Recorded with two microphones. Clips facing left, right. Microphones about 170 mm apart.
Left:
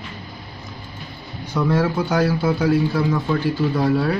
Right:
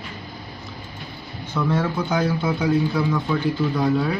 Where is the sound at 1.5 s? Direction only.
10° left (ahead or behind).